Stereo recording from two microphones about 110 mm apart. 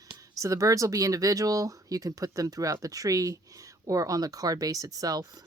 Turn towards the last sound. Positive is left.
turn(degrees=-35)  # may be behind; listen again after turning